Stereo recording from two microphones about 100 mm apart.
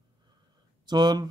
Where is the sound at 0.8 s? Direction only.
45° right (ahead or behind).